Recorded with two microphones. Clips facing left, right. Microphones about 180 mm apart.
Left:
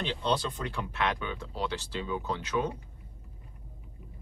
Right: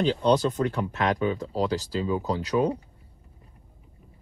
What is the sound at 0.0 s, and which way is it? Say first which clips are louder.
Speech: right 9 dB; 40° right (ahead or behind).